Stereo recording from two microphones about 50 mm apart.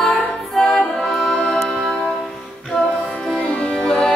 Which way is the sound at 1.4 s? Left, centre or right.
Centre.